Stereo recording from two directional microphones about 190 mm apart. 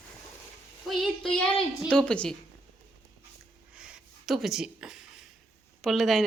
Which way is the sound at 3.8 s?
5° right (ahead or behind).